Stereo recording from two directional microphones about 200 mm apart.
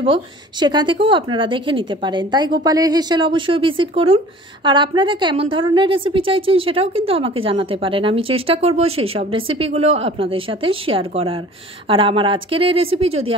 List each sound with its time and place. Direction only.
0.0 s a woman's voice: 25° right (ahead or behind)